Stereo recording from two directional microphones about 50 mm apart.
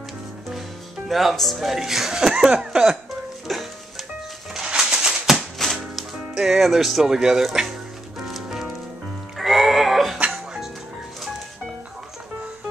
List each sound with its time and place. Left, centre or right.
0.5 s speech: centre
2.5 s cough: centre
3.4 s music: centre
4.6 s music: centre
5.6 s speech: centre
8.2 s music: centre